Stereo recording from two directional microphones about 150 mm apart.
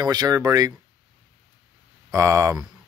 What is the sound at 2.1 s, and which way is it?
Speech, 20° right (ahead or behind).